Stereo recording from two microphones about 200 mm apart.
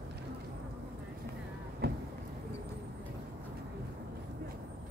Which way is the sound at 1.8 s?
55° right (ahead or behind).